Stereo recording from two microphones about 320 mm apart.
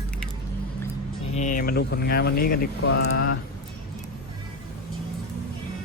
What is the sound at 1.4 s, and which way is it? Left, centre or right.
Speech, left.